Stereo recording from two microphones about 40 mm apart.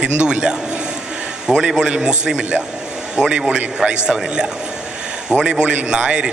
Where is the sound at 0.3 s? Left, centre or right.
Centre.